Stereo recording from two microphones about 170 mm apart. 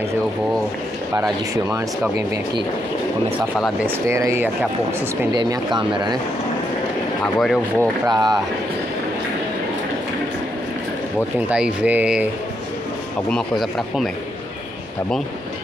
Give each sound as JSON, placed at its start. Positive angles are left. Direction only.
{"t": 3.3, "sound": "speech", "side_deg": 0}
{"t": 3.8, "sound": "speech", "side_deg": -15}
{"t": 7.3, "sound": "speech", "side_deg": 0}
{"t": 8.1, "sound": "speech", "side_deg": -25}
{"t": 11.3, "sound": "speech", "side_deg": -5}
{"t": 13.3, "sound": "speech", "side_deg": 0}